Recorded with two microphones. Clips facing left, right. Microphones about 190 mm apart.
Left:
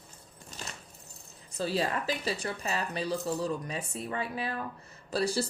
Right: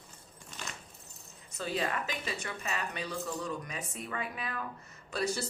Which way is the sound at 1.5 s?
35° left (ahead or behind).